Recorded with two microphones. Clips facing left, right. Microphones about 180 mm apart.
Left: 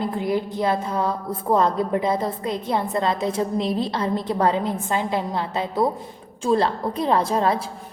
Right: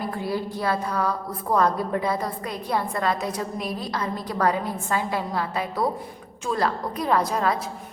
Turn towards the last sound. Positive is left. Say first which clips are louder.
# left 3 dB
turn(degrees=30)  # may be behind; listen again after turning